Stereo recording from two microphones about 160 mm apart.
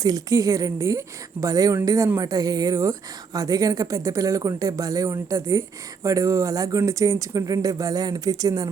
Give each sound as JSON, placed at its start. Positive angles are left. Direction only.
{"t": 0.0, "sound": "speech", "side_deg": -20}